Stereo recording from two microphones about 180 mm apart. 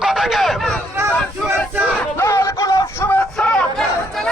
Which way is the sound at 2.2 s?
15° left (ahead or behind).